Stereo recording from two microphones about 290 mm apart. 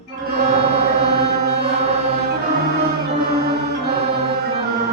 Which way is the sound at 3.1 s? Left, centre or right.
Right.